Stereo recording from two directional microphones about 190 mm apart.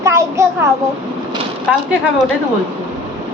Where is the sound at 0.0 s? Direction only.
15° right (ahead or behind).